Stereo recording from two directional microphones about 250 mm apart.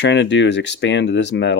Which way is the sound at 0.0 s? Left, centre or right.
Left.